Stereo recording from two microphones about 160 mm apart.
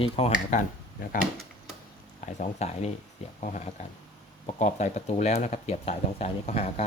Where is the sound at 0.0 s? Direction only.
40° left (ahead or behind).